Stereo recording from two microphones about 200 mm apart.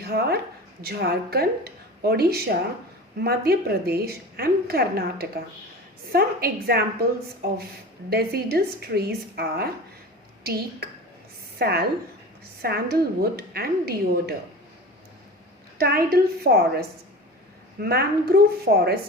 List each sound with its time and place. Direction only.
0.0 s a woman's voice: 50° right (ahead or behind)
15.8 s a woman's voice: 50° right (ahead or behind)
17.8 s a woman's voice: 50° right (ahead or behind)